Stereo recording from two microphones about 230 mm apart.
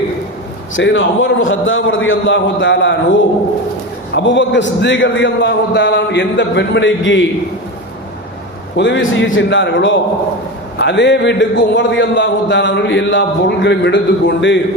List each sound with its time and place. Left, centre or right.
0.8 s a man's voice: left
4.1 s a man's voice: left
8.7 s a man's voice: left